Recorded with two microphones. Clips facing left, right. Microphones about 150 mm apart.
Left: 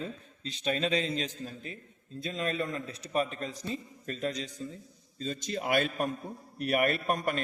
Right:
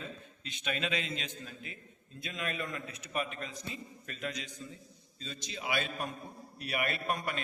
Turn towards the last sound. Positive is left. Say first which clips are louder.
# left 5 dB
turn(degrees=45)  # may be behind; listen again after turning